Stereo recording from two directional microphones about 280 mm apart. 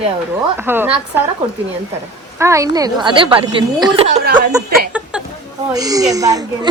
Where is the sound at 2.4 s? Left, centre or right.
Centre.